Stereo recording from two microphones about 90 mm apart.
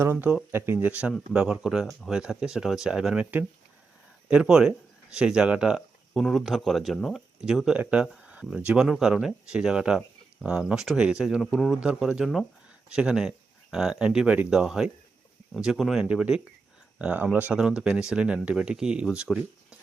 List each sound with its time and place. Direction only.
0.0 s speech: 25° right (ahead or behind)
4.3 s speech: 10° right (ahead or behind)
8.0 s speech: centre (ahead or behind)
8.3 s speech: 10° right (ahead or behind)